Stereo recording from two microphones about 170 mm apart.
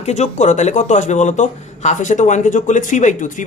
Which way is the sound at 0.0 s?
40° left (ahead or behind).